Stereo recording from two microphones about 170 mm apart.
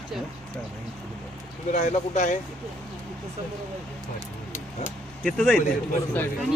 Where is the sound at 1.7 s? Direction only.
45° left (ahead or behind).